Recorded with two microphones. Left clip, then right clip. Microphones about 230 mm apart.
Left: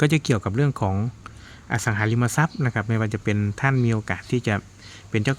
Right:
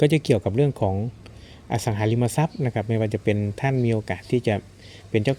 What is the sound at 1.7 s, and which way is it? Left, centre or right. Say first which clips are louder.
Speech: left 1 dB; centre.